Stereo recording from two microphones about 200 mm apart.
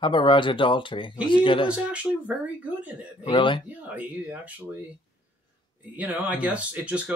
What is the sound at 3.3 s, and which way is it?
Speech, 25° left (ahead or behind).